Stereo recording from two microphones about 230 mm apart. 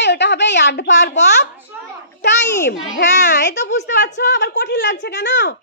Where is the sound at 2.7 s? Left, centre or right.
Left.